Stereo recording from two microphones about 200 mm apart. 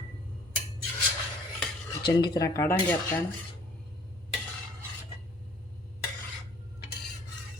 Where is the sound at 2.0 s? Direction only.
20° left (ahead or behind).